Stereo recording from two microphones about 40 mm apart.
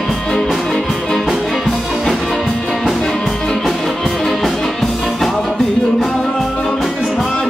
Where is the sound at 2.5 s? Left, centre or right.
Centre.